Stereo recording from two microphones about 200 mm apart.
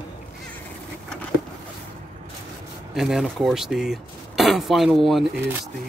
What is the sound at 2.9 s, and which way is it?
Speech, centre (ahead or behind).